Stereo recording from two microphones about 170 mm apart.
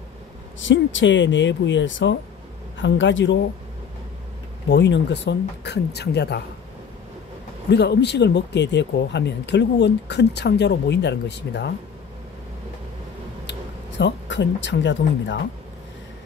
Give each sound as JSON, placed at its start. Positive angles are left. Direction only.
{"t": 0.6, "sound": "speech", "side_deg": 90}
{"t": 4.6, "sound": "speech", "side_deg": 90}
{"t": 7.7, "sound": "speech", "side_deg": 85}
{"t": 13.5, "sound": "speech", "side_deg": 90}